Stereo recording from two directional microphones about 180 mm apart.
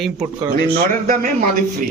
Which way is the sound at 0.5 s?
55° right (ahead or behind).